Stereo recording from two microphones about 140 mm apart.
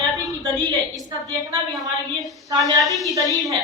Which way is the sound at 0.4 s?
30° right (ahead or behind).